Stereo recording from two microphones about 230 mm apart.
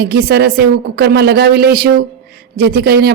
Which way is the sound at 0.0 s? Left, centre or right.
Right.